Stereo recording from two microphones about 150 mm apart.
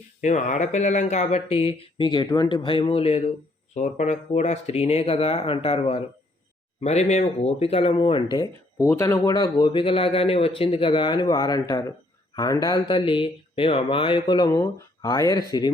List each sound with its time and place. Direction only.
0.2 s a man's voice: 50° left (ahead or behind); by 15.4 s 25° left (ahead or behind)